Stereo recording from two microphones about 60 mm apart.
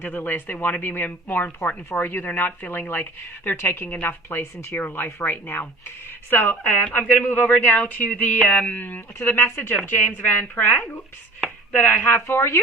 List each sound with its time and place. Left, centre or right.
0.0 s speech: left
9.1 s speech: left
12.3 s speech: left